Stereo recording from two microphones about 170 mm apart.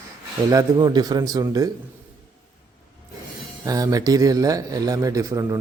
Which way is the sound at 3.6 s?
20° right (ahead or behind).